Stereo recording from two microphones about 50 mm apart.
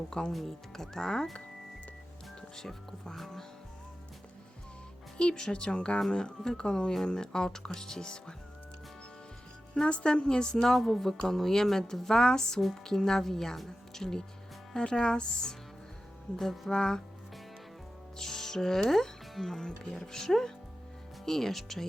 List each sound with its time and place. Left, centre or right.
0.1 s a woman's voice: centre
2.6 s a woman's voice: centre
5.1 s a woman's voice: centre
9.7 s a woman's voice: centre
18.2 s speech: centre
19.6 s a woman's voice: centre